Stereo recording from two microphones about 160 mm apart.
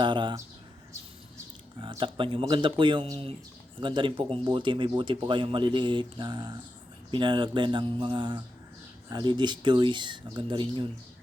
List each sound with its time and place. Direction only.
0.0 s speech: 30° right (ahead or behind)
1.8 s speech: 30° right (ahead or behind)